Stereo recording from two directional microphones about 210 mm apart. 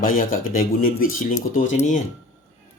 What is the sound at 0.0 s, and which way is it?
Speech, 40° left (ahead or behind).